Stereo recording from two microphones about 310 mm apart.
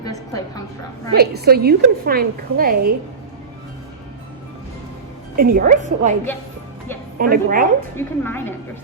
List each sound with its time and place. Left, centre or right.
0.0 s a woman's voice: centre
1.1 s a woman's voice: right
5.4 s a woman's voice: right
7.2 s a woman's voice: right
7.9 s a woman's voice: centre